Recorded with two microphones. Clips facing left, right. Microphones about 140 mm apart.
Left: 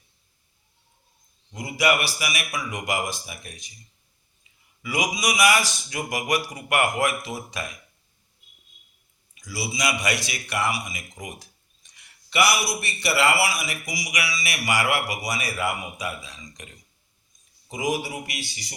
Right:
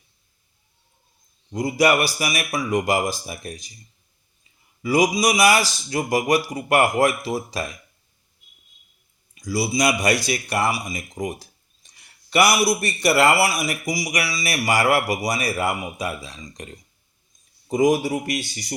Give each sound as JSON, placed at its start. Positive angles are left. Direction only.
{"t": 1.5, "sound": "speech", "side_deg": -40}
{"t": 4.8, "sound": "speech", "side_deg": -35}
{"t": 9.3, "sound": "speech", "side_deg": -40}
{"t": 17.7, "sound": "speech", "side_deg": -45}